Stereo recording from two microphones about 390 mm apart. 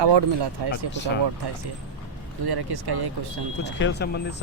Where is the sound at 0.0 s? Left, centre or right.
Right.